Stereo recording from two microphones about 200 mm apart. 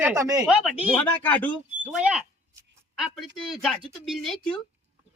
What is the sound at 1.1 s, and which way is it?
Speech, 10° left (ahead or behind).